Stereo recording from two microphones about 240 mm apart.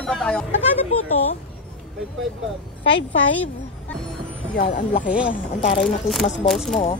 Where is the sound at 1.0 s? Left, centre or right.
Left.